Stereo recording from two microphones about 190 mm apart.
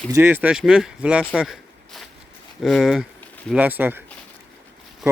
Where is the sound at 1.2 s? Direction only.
Centre (ahead or behind).